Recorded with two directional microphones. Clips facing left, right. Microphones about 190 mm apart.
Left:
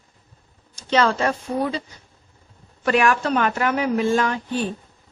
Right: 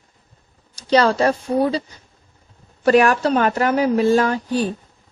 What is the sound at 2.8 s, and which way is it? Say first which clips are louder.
A woman's voice: right 5 dB; 40° right (ahead or behind).